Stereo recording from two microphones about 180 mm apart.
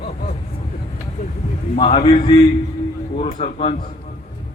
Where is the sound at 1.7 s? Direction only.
30° left (ahead or behind).